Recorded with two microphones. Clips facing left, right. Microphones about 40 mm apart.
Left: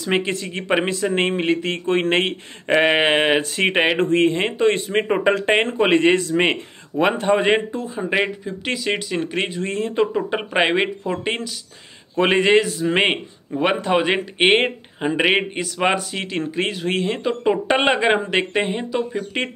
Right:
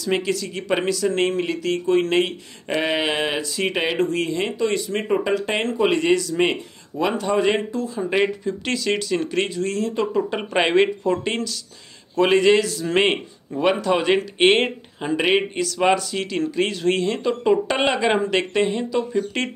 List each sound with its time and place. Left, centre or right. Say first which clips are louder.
0.0 s speech: left 1 dB; left
8.5 s a man's voice: right 1 dB; centre